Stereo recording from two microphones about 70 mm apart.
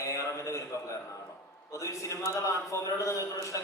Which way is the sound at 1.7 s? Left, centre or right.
Left.